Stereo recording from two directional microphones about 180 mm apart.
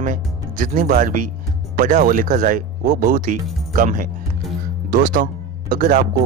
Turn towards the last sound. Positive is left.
turn(degrees=-50)  # may be behind; listen again after turning